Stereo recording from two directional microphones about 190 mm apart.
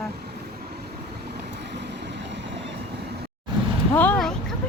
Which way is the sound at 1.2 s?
65° right (ahead or behind).